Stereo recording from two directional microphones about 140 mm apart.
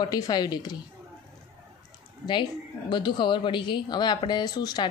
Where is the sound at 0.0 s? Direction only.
30° left (ahead or behind).